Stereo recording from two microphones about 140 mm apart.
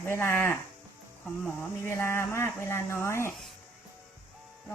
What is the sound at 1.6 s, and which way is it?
Speech, 15° left (ahead or behind).